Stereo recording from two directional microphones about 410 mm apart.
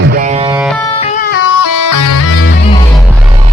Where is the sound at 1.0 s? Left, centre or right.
Centre.